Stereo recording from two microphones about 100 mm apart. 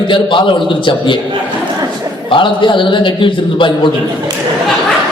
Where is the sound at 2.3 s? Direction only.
55° left (ahead or behind).